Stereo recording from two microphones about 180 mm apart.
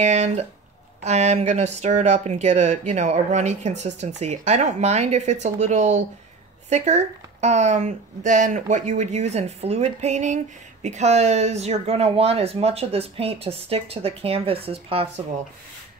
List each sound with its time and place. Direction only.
0.0 s speech: 40° right (ahead or behind)